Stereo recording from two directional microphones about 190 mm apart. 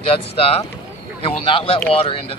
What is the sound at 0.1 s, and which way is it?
Speech, 30° left (ahead or behind).